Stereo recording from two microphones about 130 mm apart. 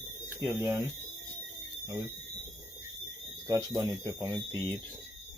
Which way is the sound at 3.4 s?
25° right (ahead or behind).